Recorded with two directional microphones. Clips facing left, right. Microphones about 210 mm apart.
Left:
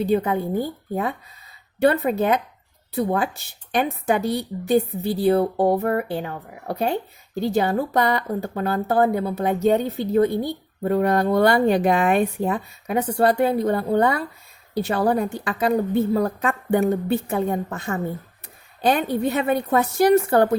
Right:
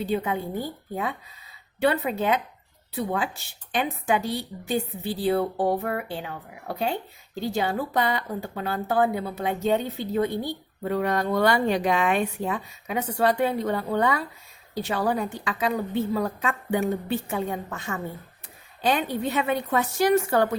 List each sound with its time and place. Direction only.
0.0 s a woman's voice: 40° left (ahead or behind)
1.8 s a woman's voice: 45° left (ahead or behind)
14.8 s a woman's voice: 50° left (ahead or behind)
15.7 s a woman's voice: 40° left (ahead or behind)